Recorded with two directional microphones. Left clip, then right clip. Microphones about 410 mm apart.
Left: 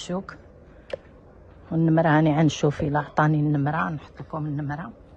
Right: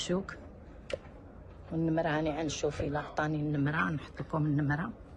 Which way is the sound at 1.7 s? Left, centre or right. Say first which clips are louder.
Left 10 dB; centre.